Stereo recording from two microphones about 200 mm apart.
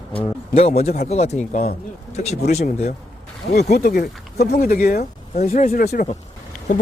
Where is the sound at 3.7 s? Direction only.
50° left (ahead or behind).